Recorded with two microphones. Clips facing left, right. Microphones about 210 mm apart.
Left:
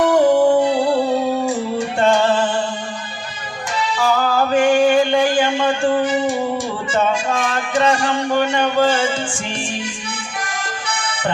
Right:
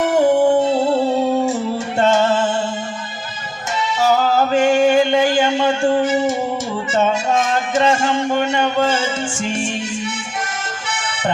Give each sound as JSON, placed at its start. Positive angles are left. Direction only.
{"t": 0.0, "sound": "music", "side_deg": -25}
{"t": 3.9, "sound": "a sound", "side_deg": -25}
{"t": 6.9, "sound": "music", "side_deg": -25}